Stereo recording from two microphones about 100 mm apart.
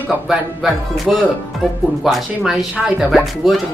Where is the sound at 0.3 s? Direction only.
Centre (ahead or behind).